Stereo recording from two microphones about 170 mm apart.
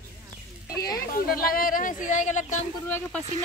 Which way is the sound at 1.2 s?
60° left (ahead or behind).